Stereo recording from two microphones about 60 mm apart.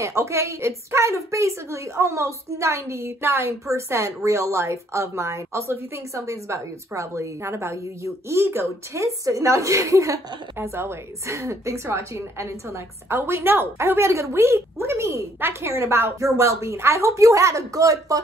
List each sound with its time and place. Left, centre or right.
0.0 s a woman's voice: right
3.6 s a woman's voice: right
9.0 s speech: right
10.7 s a woman's voice: right
16.2 s speech: right